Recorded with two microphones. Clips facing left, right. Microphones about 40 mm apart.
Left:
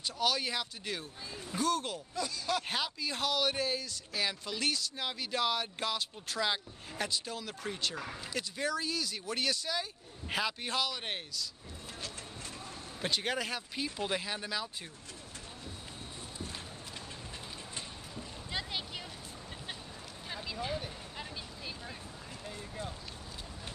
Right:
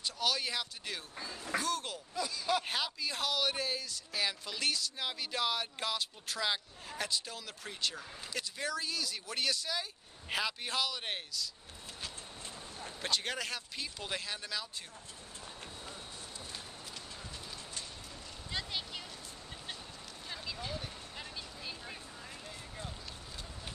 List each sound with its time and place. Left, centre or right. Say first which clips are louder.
0.0 s speech: left 2 dB; centre
7.9 s speech: left 6 dB; left
8.2 s speech: left 2 dB; centre
13.0 s speech: left 2 dB; centre
17.7 s vehicle: left 3 dB; centre
20.2 s vehicle: left 4 dB; centre
22.4 s a sound: left 7 dB; centre